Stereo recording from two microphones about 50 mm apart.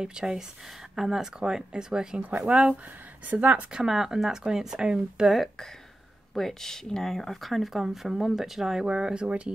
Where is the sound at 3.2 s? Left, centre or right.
Right.